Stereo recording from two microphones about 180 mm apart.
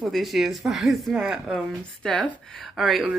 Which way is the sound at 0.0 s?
Centre (ahead or behind).